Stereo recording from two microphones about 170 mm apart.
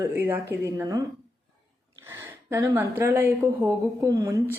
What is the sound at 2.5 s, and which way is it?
Speech, 20° right (ahead or behind).